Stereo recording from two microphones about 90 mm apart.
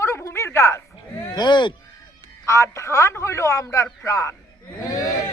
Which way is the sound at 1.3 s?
60° left (ahead or behind).